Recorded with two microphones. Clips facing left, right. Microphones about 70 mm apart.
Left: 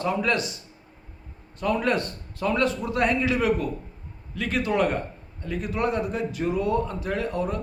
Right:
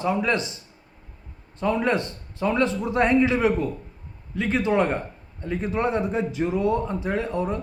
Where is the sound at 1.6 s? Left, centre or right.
Right.